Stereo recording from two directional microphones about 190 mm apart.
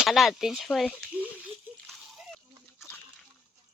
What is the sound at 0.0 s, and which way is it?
Speech, centre (ahead or behind).